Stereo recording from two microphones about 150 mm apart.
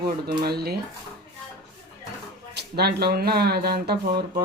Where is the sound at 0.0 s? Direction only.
90° right.